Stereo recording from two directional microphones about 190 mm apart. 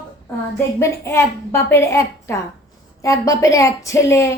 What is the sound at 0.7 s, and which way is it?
A woman's voice, 15° left (ahead or behind).